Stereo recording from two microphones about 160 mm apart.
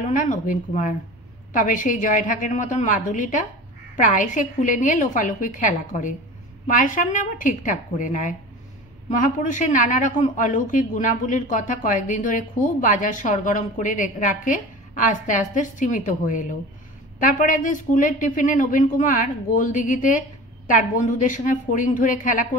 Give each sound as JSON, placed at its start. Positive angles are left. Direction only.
{"t": 0.0, "sound": "a woman's voice", "side_deg": 50}